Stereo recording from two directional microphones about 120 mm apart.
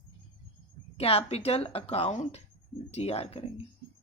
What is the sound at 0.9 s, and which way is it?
Speech, 55° left (ahead or behind).